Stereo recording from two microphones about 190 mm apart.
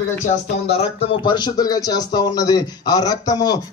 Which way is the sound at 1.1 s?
25° left (ahead or behind).